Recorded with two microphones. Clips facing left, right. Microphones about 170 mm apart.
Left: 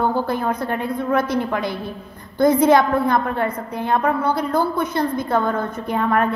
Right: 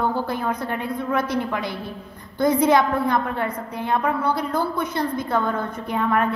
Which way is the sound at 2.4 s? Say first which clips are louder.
Left 3 dB; 45° left (ahead or behind).